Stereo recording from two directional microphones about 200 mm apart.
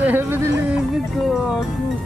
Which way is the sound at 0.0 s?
10° right (ahead or behind).